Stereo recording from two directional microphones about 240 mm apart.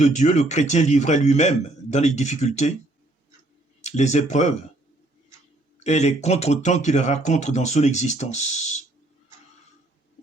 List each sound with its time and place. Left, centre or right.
0.0 s speech: left
3.8 s speech: left
5.8 s speech: left